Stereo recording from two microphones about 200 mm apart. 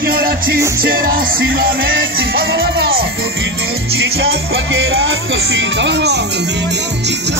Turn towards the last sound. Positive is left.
turn(degrees=-60)  # may be behind; listen again after turning